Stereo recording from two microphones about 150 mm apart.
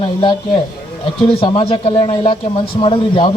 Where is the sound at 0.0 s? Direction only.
35° left (ahead or behind).